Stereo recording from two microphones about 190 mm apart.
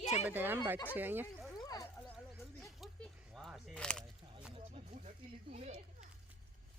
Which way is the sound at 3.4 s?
Centre (ahead or behind).